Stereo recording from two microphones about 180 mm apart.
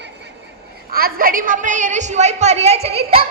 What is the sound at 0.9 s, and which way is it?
A woman's voice, 55° right (ahead or behind).